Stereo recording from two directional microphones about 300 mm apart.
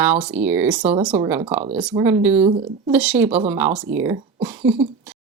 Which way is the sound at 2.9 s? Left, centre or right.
Centre.